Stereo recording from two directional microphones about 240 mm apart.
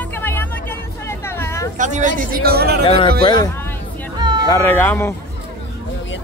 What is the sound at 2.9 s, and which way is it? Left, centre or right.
Speech, left.